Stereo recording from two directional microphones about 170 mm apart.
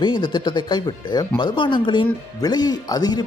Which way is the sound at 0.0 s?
25° left (ahead or behind).